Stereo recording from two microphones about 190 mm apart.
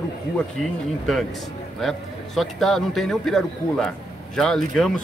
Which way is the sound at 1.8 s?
Centre (ahead or behind).